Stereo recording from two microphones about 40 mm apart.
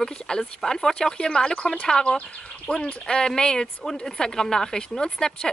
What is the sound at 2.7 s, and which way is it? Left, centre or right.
Speech, left.